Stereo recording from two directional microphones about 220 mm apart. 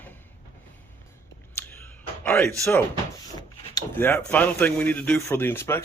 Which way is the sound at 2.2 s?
10° left (ahead or behind).